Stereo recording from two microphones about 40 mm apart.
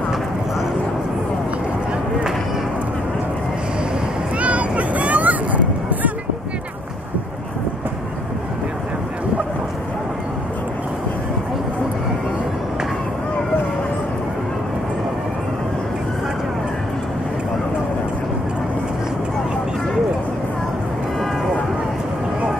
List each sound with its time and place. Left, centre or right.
4.4 s vehicle: right